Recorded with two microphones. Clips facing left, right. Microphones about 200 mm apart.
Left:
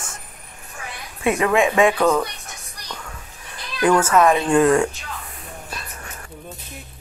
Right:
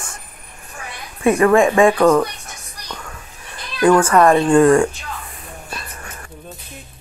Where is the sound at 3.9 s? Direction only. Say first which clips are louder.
Right 3 dB; 5° left (ahead or behind).